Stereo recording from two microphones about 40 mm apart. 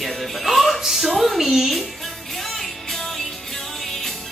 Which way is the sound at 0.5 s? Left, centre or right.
Centre.